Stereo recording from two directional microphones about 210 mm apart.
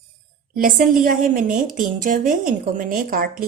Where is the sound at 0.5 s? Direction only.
40° right (ahead or behind).